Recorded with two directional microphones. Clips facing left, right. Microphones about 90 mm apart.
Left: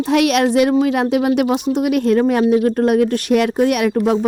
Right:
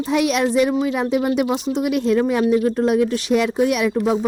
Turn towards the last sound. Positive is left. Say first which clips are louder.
# left 3 dB
turn(degrees=60)  # may be behind; listen again after turning